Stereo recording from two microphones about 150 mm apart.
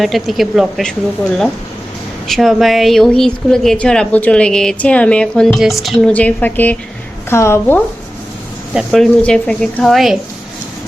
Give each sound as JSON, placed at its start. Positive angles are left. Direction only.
{"t": 0.0, "sound": "a woman's voice", "side_deg": 0}
{"t": 2.2, "sound": "a woman's voice", "side_deg": 0}
{"t": 8.7, "sound": "a woman's voice", "side_deg": 0}